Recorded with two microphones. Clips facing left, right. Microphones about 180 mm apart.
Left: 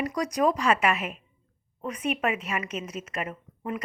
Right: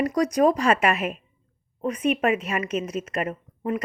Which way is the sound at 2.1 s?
40° right (ahead or behind).